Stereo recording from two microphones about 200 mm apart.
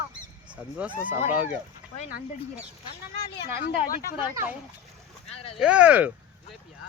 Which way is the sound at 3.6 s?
45° left (ahead or behind).